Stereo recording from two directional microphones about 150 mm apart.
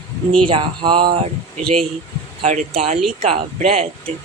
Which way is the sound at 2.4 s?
50° right (ahead or behind).